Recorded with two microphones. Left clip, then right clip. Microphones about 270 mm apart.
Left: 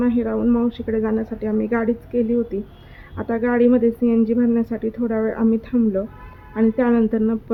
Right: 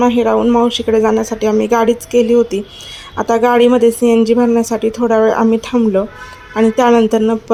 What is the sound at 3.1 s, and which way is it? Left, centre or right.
A woman's voice, centre.